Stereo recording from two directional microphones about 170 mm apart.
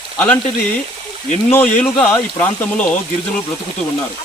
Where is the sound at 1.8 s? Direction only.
10° left (ahead or behind).